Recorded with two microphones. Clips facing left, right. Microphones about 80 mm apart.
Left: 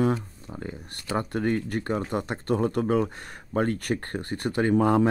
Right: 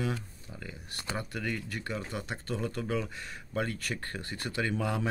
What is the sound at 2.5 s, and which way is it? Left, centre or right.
Speech, left.